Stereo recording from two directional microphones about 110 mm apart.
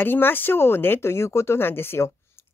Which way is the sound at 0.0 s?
20° left (ahead or behind).